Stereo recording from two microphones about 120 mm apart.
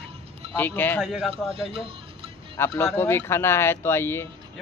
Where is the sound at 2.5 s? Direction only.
20° left (ahead or behind).